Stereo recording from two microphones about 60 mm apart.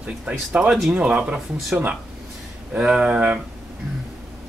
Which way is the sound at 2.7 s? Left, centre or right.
Centre.